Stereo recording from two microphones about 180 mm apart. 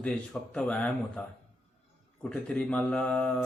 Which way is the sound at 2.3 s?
5° left (ahead or behind).